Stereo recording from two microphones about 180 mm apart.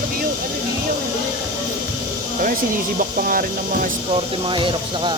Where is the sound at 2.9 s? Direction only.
50° right (ahead or behind).